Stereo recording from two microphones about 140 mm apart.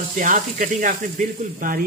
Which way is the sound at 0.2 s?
70° right (ahead or behind).